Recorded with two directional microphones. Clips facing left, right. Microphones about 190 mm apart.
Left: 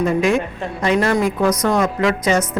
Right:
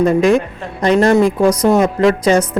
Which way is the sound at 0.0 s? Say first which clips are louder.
Right 5 dB; 35° right (ahead or behind).